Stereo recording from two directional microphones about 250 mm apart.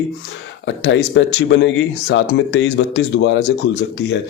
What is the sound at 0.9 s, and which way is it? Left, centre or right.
A man's voice, left.